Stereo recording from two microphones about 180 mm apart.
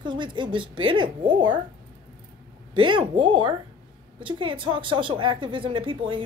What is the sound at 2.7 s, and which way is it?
A woman's voice, 25° right (ahead or behind).